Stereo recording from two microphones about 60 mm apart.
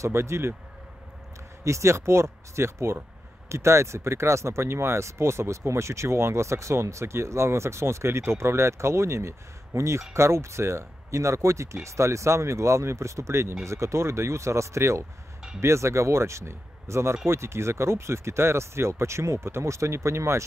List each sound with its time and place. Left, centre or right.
0.0 s speech: right
1.6 s speech: right